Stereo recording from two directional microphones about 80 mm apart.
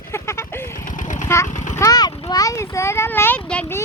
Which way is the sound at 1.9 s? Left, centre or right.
Left.